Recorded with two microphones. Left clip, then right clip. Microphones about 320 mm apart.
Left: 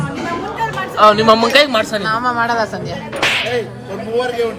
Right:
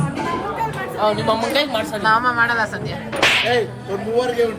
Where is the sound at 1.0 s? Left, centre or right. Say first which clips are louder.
Left 9 dB; left.